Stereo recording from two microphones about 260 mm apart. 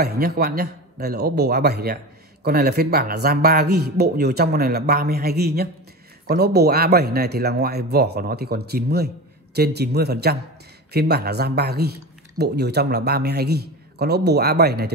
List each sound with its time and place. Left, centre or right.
0.0 s speech: right